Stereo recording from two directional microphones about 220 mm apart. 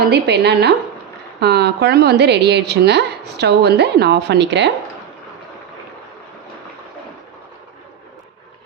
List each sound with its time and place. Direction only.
0.0 s a woman's voice: 50° right (ahead or behind)